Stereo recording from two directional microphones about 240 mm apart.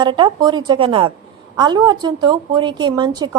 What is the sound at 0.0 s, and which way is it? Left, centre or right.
A woman's voice, centre.